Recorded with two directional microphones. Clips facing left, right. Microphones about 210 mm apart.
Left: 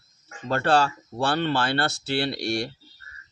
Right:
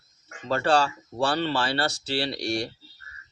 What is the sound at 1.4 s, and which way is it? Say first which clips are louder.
Speech: left 2 dB; 55° left (ahead or behind).